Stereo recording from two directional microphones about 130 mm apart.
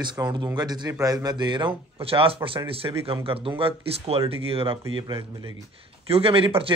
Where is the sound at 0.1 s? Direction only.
35° right (ahead or behind).